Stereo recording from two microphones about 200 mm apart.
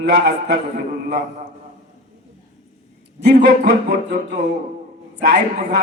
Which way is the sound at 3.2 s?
45° right (ahead or behind).